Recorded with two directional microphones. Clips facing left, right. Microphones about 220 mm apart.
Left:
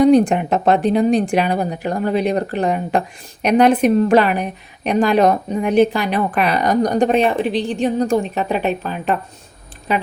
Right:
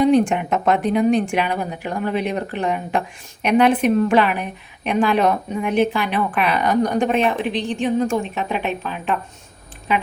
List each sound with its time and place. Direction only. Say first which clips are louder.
0.0 s a woman's voice: left 4 dB; 40° left (ahead or behind)